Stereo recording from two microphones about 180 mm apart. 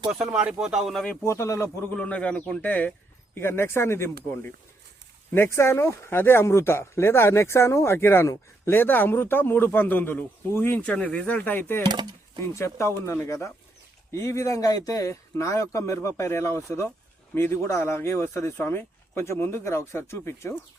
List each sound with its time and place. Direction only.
0.1 s speech: 5° right (ahead or behind); by 4.1 s 15° left (ahead or behind)
5.3 s speech: 15° left (ahead or behind)
11.9 s speech: 25° right (ahead or behind)
12.5 s speech: 15° left (ahead or behind)